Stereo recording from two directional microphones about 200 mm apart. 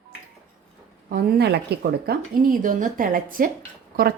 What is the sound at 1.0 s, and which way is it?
Speech, 50° right (ahead or behind).